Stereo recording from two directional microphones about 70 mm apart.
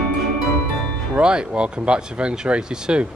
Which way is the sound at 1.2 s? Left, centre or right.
Centre.